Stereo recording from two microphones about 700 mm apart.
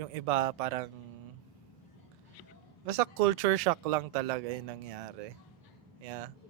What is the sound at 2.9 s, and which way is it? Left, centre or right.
A man's voice, right.